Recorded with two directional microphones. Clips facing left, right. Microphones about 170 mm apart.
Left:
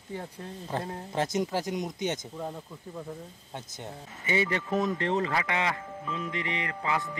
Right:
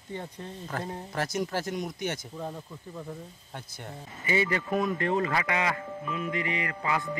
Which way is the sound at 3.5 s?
20° left (ahead or behind).